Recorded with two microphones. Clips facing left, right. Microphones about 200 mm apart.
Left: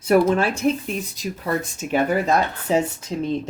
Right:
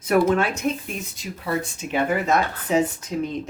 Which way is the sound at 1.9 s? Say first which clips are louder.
Left 2 dB; 35° left (ahead or behind).